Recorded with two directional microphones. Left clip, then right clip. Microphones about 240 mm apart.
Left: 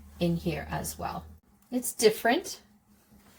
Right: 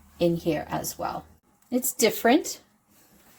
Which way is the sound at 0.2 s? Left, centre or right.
Right.